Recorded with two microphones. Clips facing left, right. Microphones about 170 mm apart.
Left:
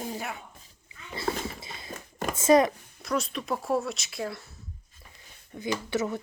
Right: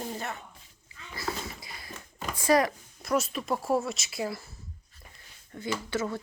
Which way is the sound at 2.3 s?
20° left (ahead or behind).